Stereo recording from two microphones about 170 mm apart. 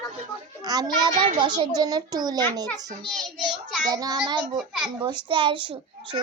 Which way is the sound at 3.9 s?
25° right (ahead or behind).